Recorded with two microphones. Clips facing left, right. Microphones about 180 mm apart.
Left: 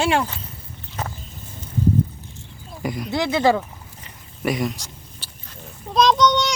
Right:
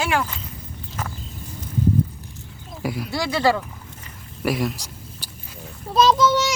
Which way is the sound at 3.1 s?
20° left (ahead or behind).